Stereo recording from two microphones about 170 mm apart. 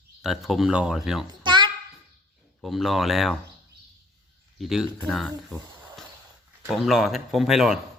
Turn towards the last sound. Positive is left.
turn(degrees=0)  # may be behind; listen again after turning